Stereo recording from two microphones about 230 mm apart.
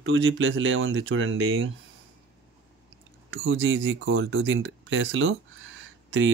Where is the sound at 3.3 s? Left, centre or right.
Right.